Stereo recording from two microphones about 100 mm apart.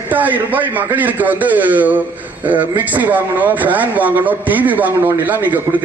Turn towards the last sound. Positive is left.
turn(degrees=-15)  # may be behind; listen again after turning